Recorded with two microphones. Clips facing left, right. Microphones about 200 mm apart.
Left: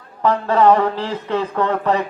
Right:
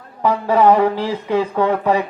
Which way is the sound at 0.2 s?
10° right (ahead or behind).